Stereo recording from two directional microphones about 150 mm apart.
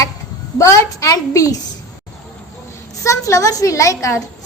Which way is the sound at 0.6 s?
20° left (ahead or behind).